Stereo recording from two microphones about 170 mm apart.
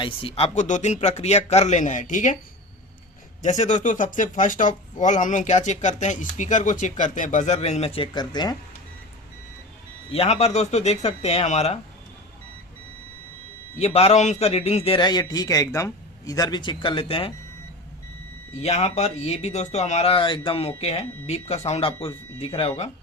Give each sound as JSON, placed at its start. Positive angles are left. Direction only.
{"t": 0.0, "sound": "speech", "side_deg": 35}
{"t": 3.6, "sound": "speech", "side_deg": 45}
{"t": 10.1, "sound": "speech", "side_deg": 40}
{"t": 13.7, "sound": "speech", "side_deg": 40}
{"t": 14.9, "sound": "speech", "side_deg": 25}
{"t": 18.6, "sound": "speech", "side_deg": 40}